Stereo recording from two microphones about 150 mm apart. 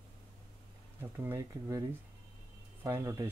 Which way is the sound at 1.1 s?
20° right (ahead or behind).